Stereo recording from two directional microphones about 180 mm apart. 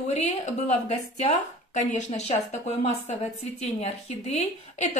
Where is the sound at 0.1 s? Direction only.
35° left (ahead or behind).